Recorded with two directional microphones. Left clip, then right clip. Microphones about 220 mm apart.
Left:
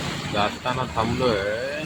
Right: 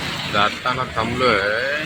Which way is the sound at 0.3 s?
5° left (ahead or behind).